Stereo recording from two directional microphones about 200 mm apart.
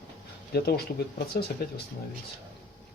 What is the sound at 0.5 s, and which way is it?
Speech, 50° left (ahead or behind).